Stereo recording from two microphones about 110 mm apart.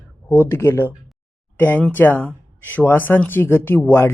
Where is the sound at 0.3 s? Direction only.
20° left (ahead or behind).